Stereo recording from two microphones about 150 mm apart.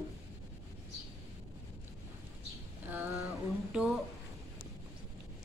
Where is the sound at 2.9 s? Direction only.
15° right (ahead or behind).